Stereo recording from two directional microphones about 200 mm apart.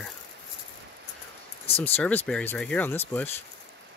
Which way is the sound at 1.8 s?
10° left (ahead or behind).